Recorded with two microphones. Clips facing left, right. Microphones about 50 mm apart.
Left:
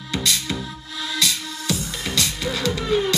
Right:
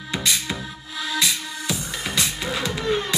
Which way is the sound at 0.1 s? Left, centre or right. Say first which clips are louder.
Left 1 dB; centre.